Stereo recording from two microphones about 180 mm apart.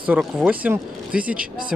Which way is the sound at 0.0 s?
5° right (ahead or behind).